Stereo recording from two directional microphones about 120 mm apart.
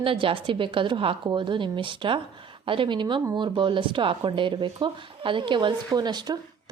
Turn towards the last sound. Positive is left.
turn(degrees=-35)  # may be behind; listen again after turning